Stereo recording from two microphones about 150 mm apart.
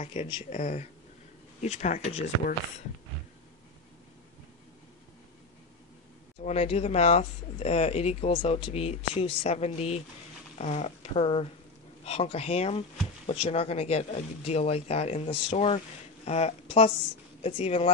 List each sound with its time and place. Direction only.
0.0 s speech: 45° left (ahead or behind)
6.4 s speech: 45° left (ahead or behind)